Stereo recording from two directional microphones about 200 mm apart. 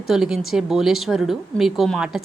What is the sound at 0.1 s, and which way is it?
A woman's voice, centre (ahead or behind).